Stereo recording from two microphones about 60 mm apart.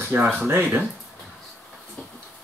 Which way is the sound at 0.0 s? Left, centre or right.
Right.